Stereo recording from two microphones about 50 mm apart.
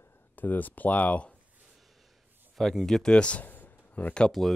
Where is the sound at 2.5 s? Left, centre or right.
Centre; by 3.5 s left.